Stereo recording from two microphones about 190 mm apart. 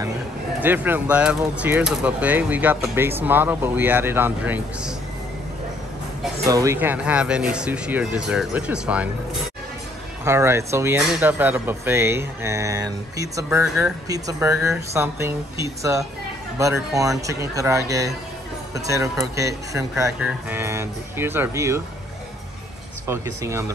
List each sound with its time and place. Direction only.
0.6 s speech: 10° right (ahead or behind)
6.4 s speech: 15° right (ahead or behind)
10.2 s speech: 15° right (ahead or behind)
19.3 s speech: 15° right (ahead or behind)
23.0 s speech: 15° right (ahead or behind)